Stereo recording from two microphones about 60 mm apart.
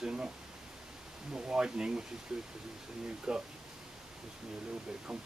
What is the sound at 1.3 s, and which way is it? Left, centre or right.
Speech, centre.